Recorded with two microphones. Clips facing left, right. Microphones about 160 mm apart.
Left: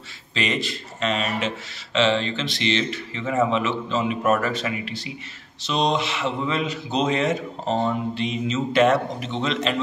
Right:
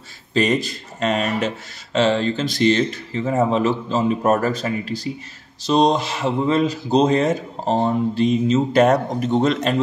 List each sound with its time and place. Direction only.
0.3 s speech: 40° right (ahead or behind)